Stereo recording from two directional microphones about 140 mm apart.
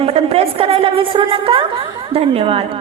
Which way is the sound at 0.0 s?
45° right (ahead or behind).